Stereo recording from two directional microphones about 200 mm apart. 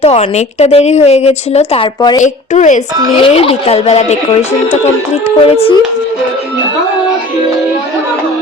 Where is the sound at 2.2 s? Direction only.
35° left (ahead or behind).